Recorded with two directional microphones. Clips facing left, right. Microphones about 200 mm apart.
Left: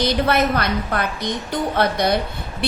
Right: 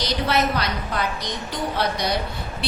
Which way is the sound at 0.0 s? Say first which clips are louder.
Left 4 dB; 55° left (ahead or behind).